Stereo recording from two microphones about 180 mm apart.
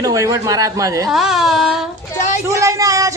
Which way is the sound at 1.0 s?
Centre (ahead or behind).